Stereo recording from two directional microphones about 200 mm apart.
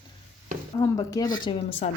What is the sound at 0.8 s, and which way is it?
Speech, 15° left (ahead or behind).